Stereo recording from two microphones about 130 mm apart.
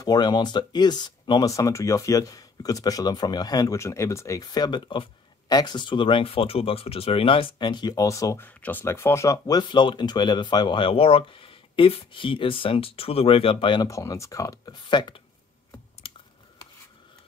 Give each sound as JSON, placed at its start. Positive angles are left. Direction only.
{"t": 0.0, "sound": "speech", "side_deg": 30}
{"t": 13.8, "sound": "speech", "side_deg": 25}